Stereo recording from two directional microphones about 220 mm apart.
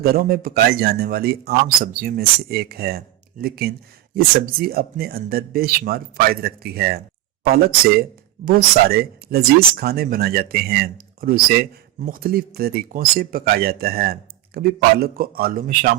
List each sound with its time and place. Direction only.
0.0 s speech: 45° right (ahead or behind)